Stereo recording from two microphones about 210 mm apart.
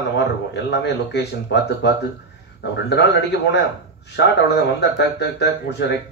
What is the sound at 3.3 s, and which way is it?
A man's voice, 55° left (ahead or behind).